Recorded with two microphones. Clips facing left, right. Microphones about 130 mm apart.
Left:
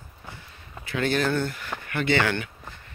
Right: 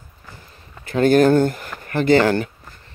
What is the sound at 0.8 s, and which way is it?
Speech, 45° right (ahead or behind).